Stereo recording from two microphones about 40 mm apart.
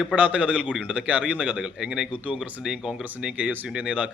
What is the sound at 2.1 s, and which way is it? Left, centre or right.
Speech, right.